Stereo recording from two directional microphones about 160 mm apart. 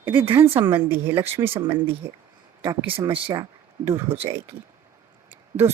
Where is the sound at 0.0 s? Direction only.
15° right (ahead or behind).